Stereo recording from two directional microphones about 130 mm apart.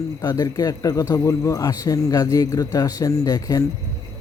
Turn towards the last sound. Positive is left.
turn(degrees=30)  # may be behind; listen again after turning